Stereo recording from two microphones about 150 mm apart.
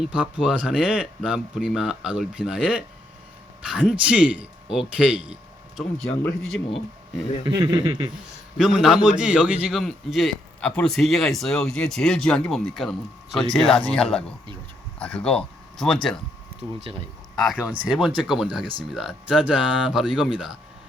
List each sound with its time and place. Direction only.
0.0 s a man's voice: 10° right (ahead or behind)
7.4 s speech: 25° right (ahead or behind)
8.5 s a man's voice: centre (ahead or behind)
17.3 s a man's voice: centre (ahead or behind)